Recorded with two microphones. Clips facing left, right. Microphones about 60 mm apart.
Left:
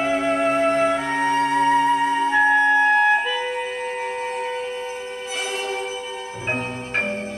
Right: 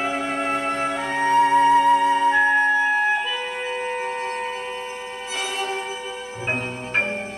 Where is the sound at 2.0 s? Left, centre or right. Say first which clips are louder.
Right 1 dB; centre.